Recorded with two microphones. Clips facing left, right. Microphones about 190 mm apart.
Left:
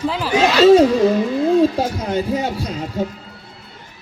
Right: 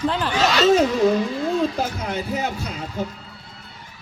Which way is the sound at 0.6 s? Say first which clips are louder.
Left 7 dB; 30° left (ahead or behind).